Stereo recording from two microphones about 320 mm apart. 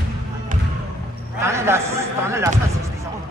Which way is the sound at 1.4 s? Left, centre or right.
Centre.